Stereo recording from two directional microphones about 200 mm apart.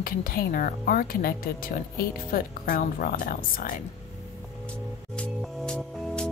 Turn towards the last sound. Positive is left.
turn(degrees=5)  # may be behind; listen again after turning